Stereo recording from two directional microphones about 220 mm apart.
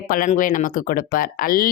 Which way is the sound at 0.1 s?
35° left (ahead or behind).